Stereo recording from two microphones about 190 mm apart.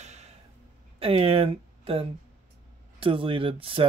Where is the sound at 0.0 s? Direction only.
35° right (ahead or behind).